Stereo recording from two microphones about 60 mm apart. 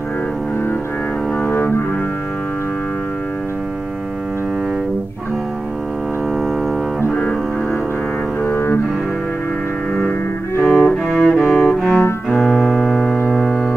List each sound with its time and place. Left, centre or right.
1.4 s cello: left
8.5 s cello: left
10.6 s cello: centre
12.4 s music: centre